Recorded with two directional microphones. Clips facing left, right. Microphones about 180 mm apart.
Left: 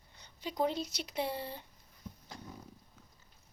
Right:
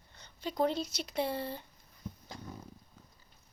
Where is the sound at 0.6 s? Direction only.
15° left (ahead or behind).